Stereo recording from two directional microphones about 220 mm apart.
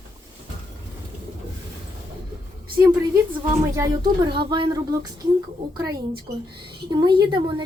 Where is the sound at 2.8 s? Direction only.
15° right (ahead or behind).